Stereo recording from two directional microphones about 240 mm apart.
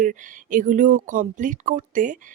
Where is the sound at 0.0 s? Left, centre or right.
Right.